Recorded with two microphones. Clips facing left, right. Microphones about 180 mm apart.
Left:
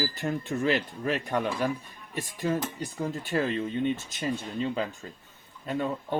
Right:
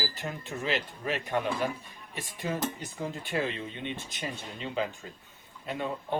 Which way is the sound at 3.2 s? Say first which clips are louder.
Left 4 dB; 40° left (ahead or behind).